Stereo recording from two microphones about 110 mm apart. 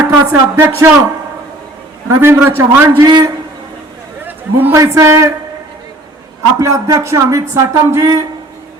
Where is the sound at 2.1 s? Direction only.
20° right (ahead or behind).